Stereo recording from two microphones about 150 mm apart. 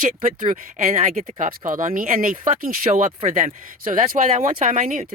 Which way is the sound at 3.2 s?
50° right (ahead or behind).